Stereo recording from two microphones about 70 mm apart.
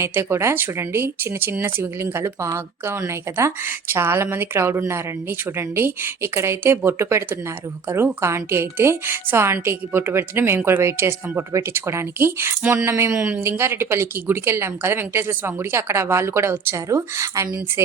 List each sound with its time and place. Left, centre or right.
0.0 s speech: right
13.1 s speech: centre
13.4 s speech: right